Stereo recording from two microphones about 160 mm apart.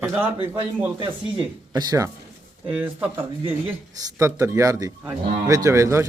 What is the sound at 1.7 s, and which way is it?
Speech, 25° right (ahead or behind).